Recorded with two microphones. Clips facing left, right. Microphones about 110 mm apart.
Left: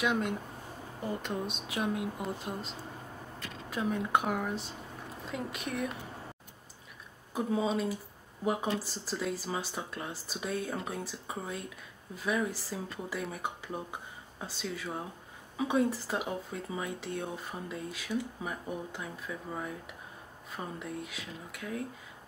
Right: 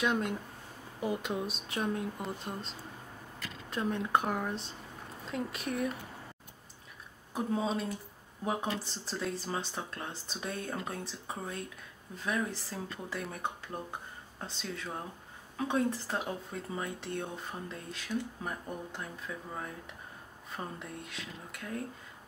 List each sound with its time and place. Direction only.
0.0 s speech: centre (ahead or behind)
3.7 s speech: 5° left (ahead or behind)
7.3 s speech: centre (ahead or behind)